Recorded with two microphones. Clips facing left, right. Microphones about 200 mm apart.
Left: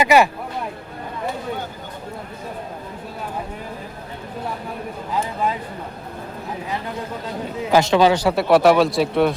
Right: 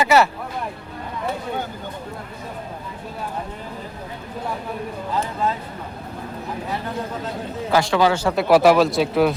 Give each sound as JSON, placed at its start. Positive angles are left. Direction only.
{"t": 0.0, "sound": "speech", "side_deg": 15}
{"t": 7.7, "sound": "speech", "side_deg": 20}
{"t": 8.4, "sound": "speech", "side_deg": 0}